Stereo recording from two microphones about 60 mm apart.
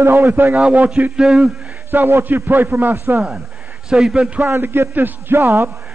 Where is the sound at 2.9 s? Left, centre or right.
Right.